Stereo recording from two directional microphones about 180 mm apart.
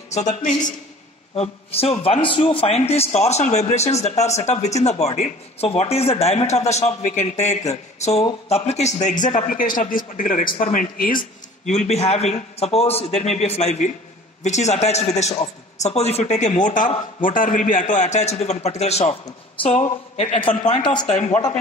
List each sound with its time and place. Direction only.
0.4 s a man's voice: 45° left (ahead or behind)
1.3 s a man's voice: 35° left (ahead or behind)
21.1 s speech: 10° left (ahead or behind)